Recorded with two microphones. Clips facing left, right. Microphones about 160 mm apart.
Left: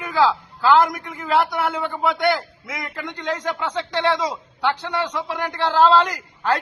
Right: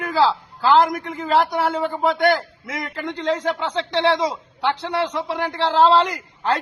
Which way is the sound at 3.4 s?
30° right (ahead or behind).